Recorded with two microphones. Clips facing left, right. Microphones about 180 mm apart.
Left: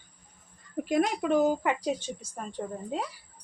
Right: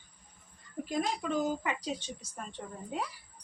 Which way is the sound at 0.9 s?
70° left (ahead or behind).